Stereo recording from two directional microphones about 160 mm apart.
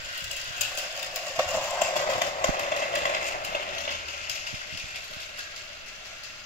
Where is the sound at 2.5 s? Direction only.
55° left (ahead or behind).